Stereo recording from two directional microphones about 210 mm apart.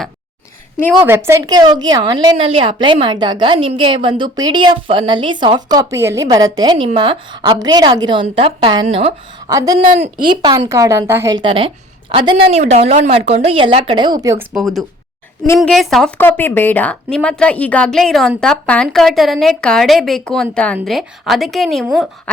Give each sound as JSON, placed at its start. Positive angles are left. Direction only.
{"t": 1.0, "sound": "a woman's voice", "side_deg": -10}
{"t": 9.5, "sound": "speech", "side_deg": -15}
{"t": 9.8, "sound": "speech", "side_deg": -40}
{"t": 10.2, "sound": "a woman's voice", "side_deg": -20}
{"t": 14.5, "sound": "a woman's voice", "side_deg": 0}